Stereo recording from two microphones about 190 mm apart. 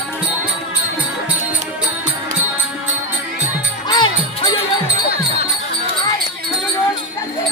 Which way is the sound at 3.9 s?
25° left (ahead or behind).